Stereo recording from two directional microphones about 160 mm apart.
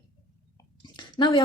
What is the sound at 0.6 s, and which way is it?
Chewing, 25° left (ahead or behind).